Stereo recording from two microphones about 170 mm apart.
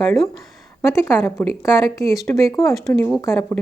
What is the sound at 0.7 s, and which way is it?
A woman's voice, 15° left (ahead or behind).